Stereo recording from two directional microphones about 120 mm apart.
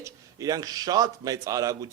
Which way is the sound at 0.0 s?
30° right (ahead or behind).